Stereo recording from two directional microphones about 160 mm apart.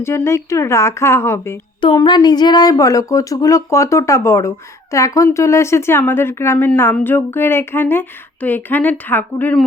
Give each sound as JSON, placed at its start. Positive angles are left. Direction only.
{"t": 0.0, "sound": "speech", "side_deg": 15}
{"t": 1.8, "sound": "speech", "side_deg": 30}